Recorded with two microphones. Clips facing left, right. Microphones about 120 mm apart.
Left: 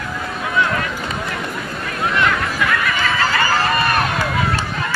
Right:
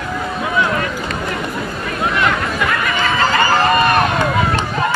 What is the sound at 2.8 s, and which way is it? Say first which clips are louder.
Run: right 3 dB; 20° right (ahead or behind).